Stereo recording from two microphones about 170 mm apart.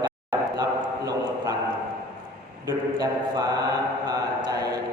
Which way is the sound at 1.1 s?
20° right (ahead or behind).